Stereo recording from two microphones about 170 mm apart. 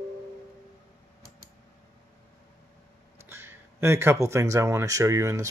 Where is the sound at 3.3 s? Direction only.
15° right (ahead or behind).